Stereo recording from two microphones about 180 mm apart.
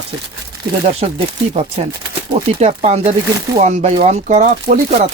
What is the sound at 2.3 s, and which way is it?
Speech, 35° right (ahead or behind).